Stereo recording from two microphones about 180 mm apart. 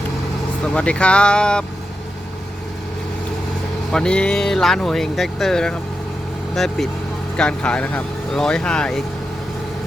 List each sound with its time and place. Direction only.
0.6 s speech: 5° left (ahead or behind)
3.9 s speech: 5° left (ahead or behind)